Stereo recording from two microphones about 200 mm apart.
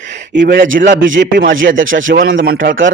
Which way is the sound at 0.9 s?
70° right (ahead or behind).